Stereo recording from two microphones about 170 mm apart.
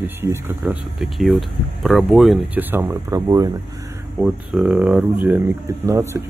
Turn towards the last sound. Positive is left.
turn(degrees=-15)  # may be behind; listen again after turning